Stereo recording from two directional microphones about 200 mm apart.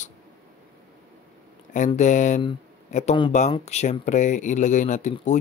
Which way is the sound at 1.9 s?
35° left (ahead or behind).